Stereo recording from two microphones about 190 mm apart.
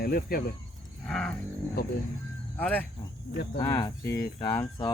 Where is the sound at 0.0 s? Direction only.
50° left (ahead or behind).